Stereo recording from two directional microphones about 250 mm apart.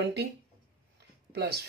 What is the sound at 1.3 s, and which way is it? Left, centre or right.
Speech, right.